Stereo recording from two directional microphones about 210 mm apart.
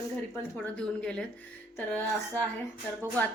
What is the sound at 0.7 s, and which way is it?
A woman's voice, 5° left (ahead or behind).